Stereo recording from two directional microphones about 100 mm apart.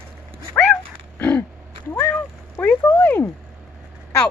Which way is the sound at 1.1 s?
15° left (ahead or behind).